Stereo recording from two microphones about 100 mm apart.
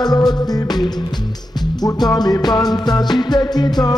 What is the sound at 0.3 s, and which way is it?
Music, 45° left (ahead or behind).